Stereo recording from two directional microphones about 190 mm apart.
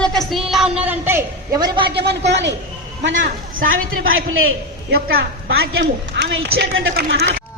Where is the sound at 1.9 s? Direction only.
60° right (ahead or behind).